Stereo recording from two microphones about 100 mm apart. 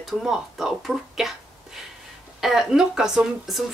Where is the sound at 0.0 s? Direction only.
5° right (ahead or behind).